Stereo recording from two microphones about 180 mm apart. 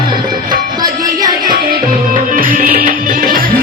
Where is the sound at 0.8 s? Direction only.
20° right (ahead or behind).